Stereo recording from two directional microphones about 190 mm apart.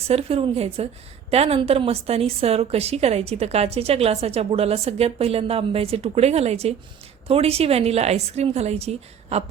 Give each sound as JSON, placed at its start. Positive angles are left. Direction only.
{"t": 0.1, "sound": "a woman's voice", "side_deg": -30}